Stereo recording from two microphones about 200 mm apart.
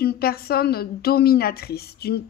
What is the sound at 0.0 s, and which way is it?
A woman's voice, 50° left (ahead or behind).